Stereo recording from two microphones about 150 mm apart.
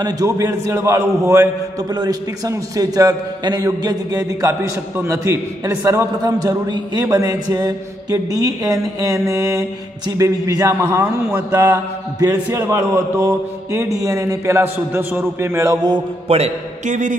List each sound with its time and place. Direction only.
0.0 s a man's voice: 25° right (ahead or behind)
16.3 s a man's voice: 50° right (ahead or behind)